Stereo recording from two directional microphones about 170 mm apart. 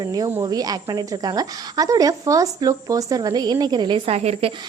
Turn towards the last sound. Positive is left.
turn(degrees=-35)  # may be behind; listen again after turning